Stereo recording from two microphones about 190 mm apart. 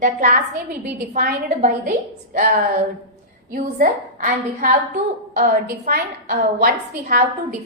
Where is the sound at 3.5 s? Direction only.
45° right (ahead or behind).